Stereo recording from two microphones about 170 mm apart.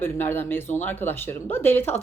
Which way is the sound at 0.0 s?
15° left (ahead or behind).